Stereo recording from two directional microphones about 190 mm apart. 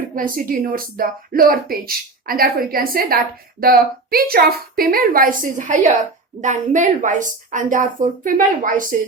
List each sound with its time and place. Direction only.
0.2 s speech: 50° right (ahead or behind)